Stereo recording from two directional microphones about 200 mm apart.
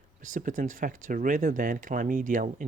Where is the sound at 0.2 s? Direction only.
40° right (ahead or behind).